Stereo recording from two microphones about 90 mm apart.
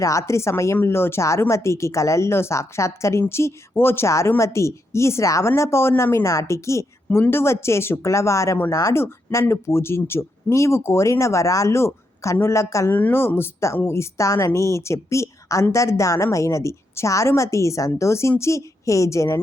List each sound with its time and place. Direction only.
0.0 s a woman's voice: 35° left (ahead or behind)
12.9 s a woman's voice: 20° left (ahead or behind)